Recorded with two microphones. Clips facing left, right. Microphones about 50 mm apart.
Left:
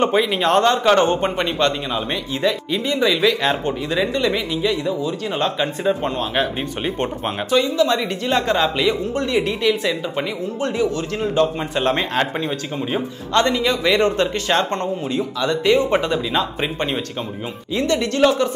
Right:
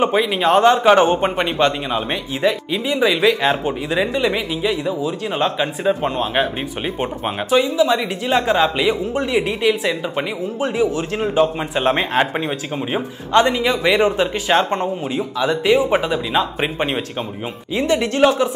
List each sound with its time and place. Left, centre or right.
0.0 s a man's voice: centre
16.6 s a man's voice: centre